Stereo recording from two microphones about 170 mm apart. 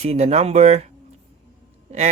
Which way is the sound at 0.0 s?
40° right (ahead or behind).